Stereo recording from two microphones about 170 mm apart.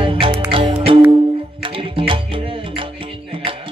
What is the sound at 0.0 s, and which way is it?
Music, 30° right (ahead or behind).